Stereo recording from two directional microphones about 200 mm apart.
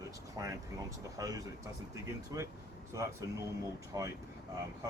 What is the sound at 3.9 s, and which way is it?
Speech, 15° right (ahead or behind).